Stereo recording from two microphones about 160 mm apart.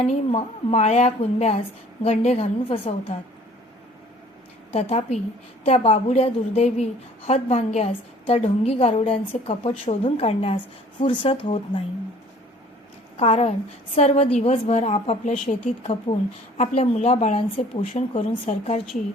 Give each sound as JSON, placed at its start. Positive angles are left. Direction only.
{"t": 0.0, "sound": "a woman's voice", "side_deg": 40}
{"t": 4.7, "sound": "a woman's voice", "side_deg": 40}
{"t": 13.1, "sound": "a woman's voice", "side_deg": 40}